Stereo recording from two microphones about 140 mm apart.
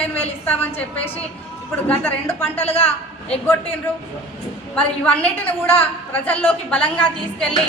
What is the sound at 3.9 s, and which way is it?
A man's voice, 15° left (ahead or behind).